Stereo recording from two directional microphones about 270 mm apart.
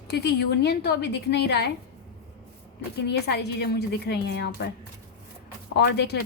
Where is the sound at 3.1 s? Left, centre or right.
Left.